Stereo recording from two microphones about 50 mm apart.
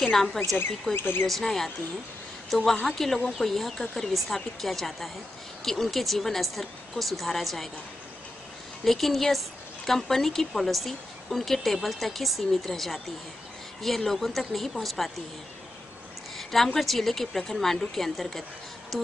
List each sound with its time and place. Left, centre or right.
0.1 s a woman's voice: centre
0.9 s speech: left
1.2 s a woman's voice: centre
8.8 s a woman's voice: centre
16.3 s a woman's voice: centre